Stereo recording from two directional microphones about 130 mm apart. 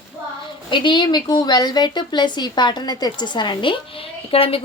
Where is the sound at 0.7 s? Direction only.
35° left (ahead or behind).